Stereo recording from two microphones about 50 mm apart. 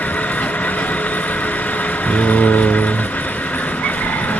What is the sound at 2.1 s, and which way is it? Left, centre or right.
Speech, left.